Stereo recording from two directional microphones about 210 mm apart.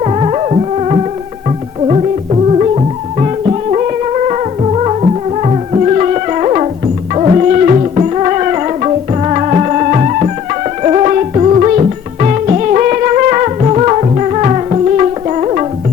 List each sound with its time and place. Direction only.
0.0 s music: 30° right (ahead or behind)